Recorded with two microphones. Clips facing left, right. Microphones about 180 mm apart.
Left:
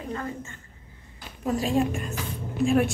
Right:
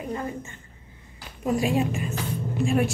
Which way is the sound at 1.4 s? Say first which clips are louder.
Right 1 dB; 10° right (ahead or behind).